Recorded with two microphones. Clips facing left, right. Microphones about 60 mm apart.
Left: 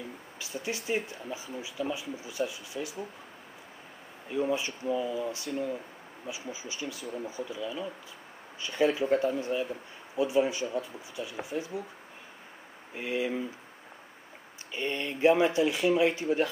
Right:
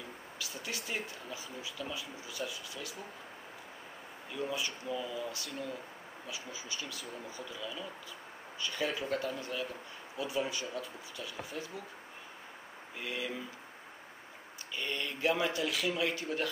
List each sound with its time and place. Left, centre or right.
0.4 s speech: left
4.3 s speech: left
12.9 s speech: left
14.7 s speech: left